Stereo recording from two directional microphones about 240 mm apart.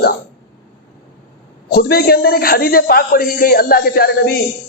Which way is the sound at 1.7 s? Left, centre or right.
Left.